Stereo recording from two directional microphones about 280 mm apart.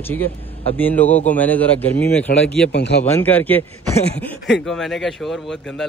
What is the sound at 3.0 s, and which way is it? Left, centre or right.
Speech, centre.